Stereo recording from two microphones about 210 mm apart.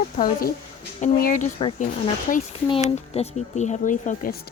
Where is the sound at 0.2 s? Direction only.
40° left (ahead or behind).